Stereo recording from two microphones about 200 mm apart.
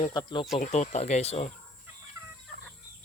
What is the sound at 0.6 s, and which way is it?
Speech, 35° left (ahead or behind).